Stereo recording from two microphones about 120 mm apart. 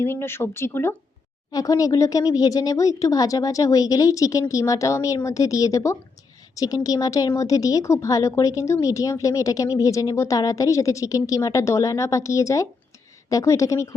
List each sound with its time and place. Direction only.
0.0 s a woman's voice: 20° left (ahead or behind)
1.5 s a woman's voice: 30° left (ahead or behind)